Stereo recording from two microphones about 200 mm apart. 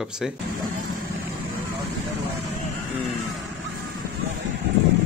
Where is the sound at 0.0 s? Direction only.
5° right (ahead or behind).